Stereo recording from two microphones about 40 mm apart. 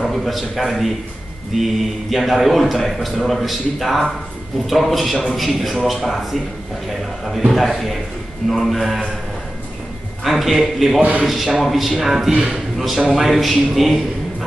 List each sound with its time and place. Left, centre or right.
0.0 s speech: centre
10.2 s speech: centre
11.0 s a man's voice: right
11.2 s speech: centre
12.4 s a man's voice: centre
12.7 s speech: centre